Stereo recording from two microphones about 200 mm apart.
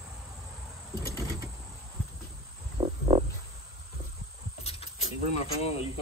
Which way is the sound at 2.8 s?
30° right (ahead or behind).